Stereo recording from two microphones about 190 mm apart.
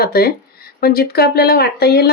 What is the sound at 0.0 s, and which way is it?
Speech, 55° left (ahead or behind).